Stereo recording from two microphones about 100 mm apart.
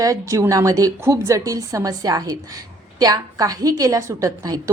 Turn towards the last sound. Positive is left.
turn(degrees=-35)  # may be behind; listen again after turning